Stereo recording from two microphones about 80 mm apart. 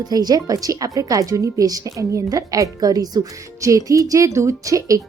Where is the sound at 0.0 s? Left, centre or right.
Right.